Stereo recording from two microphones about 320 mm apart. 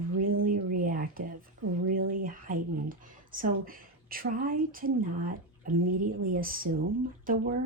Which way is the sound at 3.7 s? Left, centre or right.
Right.